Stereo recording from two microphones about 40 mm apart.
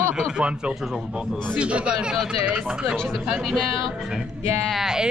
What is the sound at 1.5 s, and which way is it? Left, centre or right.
Speech, right.